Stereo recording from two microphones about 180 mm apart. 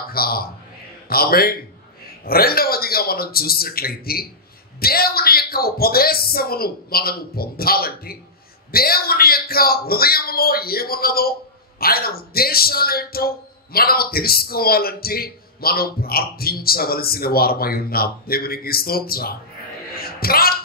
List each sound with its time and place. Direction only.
0.1 s a man's voice: 55° left (ahead or behind)
20.0 s music: 55° left (ahead or behind)